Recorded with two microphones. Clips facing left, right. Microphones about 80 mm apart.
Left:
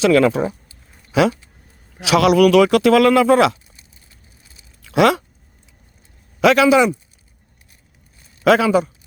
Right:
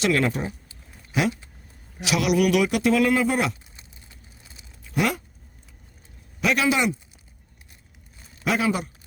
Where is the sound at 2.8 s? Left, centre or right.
Left.